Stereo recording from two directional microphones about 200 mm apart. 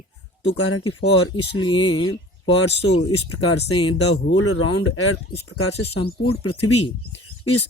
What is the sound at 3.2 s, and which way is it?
Speech, 90° left.